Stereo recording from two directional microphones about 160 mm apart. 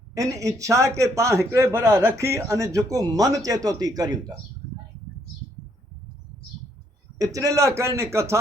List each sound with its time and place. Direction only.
0.1 s a man's voice: 20° right (ahead or behind)
7.2 s a man's voice: 20° right (ahead or behind)